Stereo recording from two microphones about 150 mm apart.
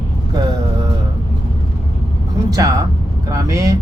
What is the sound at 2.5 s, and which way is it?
Speech, 25° right (ahead or behind).